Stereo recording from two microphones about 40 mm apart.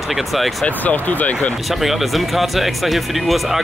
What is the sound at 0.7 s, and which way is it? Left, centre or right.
Speech, left.